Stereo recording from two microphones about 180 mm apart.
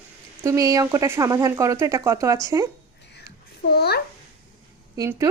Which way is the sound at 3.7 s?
60° left (ahead or behind).